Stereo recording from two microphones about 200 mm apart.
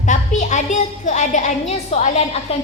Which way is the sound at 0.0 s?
40° left (ahead or behind).